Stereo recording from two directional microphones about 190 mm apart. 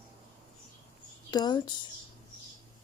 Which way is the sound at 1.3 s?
20° left (ahead or behind).